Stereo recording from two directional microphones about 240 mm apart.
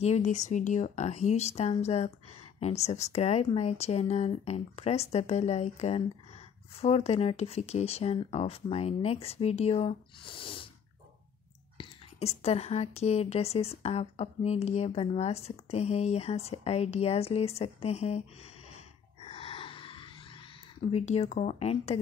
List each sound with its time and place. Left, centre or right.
0.0 s speech: left
11.8 s speech: left
19.2 s a sound: left
20.9 s speech: left